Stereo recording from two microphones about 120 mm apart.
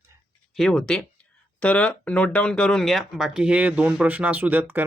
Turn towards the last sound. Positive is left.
turn(degrees=-15)  # may be behind; listen again after turning